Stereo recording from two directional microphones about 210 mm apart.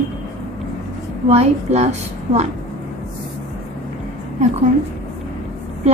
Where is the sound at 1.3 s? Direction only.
30° right (ahead or behind).